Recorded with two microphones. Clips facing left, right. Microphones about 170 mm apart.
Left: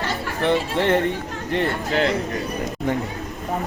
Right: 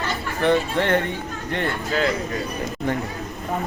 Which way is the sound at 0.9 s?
30° left (ahead or behind).